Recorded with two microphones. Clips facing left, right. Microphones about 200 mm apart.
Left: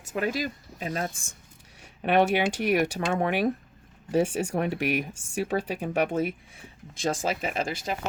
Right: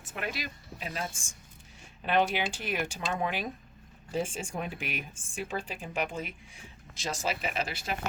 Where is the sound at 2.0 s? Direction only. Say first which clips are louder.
Left 6 dB; 65° left (ahead or behind).